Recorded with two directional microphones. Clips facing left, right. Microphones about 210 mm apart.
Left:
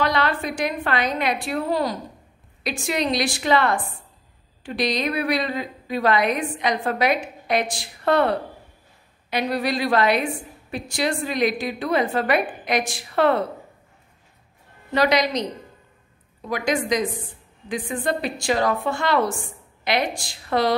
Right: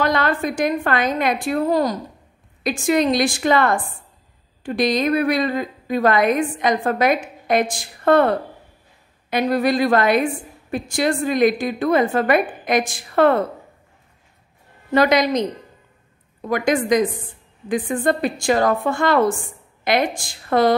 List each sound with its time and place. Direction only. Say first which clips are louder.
0.0 s a woman's voice: right 3 dB; 50° right (ahead or behind)
14.9 s a woman's voice: right 4 dB; 50° right (ahead or behind)
16.4 s a woman's voice: right 5 dB; 50° right (ahead or behind)